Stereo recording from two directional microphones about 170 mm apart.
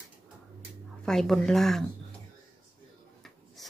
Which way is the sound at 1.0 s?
5° left (ahead or behind).